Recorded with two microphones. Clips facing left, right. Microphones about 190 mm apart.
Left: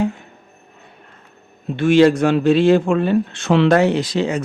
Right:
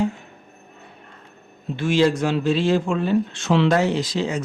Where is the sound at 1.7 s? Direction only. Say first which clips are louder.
Left 6 dB; 60° left (ahead or behind).